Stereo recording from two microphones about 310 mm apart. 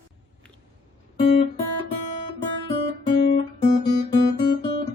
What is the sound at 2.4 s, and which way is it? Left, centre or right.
Guitar, centre.